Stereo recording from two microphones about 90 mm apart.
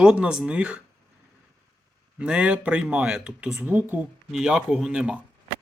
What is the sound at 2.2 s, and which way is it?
Speech, 10° right (ahead or behind).